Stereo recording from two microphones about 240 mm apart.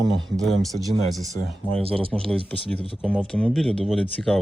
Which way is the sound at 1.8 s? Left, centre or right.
Right.